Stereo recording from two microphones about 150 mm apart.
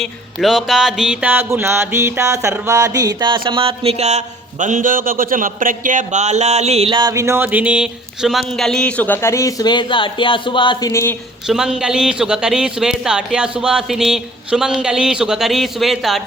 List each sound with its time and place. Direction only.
0.0 s music: centre (ahead or behind); by 4.2 s 45° right (ahead or behind)
4.6 s speech: 60° right (ahead or behind); by 11.1 s 20° left (ahead or behind)
11.4 s a man's voice: 5° right (ahead or behind)